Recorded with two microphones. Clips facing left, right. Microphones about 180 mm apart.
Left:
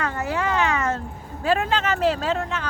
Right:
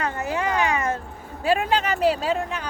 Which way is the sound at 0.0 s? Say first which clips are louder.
Even; 20° right (ahead or behind).